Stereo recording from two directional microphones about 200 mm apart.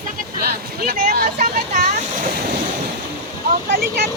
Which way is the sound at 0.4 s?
50° right (ahead or behind).